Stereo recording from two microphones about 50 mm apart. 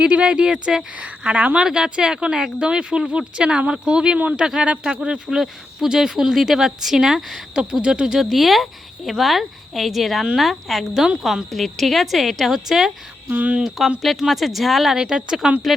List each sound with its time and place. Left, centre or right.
0.0 s speech: centre
0.9 s speech: right
1.5 s speech: centre
4.4 s speech: centre
5.4 s speech: centre
7.5 s speech: centre
13.3 s speech: right
13.6 s speech: centre
14.9 s speech: centre